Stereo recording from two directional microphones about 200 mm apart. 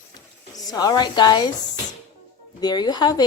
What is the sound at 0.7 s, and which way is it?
Speech, 20° left (ahead or behind).